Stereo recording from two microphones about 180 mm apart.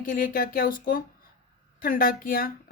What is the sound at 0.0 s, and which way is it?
Speech, 50° left (ahead or behind).